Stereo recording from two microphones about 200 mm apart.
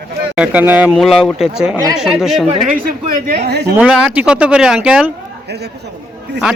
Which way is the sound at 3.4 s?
55° right (ahead or behind).